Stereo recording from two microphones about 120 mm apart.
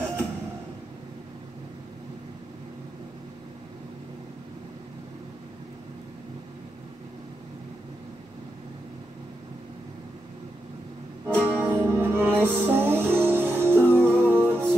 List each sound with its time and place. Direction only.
11.2 s music: 15° right (ahead or behind)